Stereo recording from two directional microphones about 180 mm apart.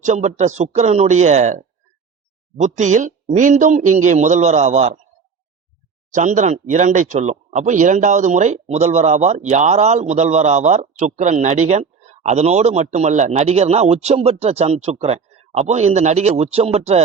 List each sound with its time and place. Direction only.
0.0 s speech: 40° right (ahead or behind)
6.1 s speech: 45° right (ahead or behind)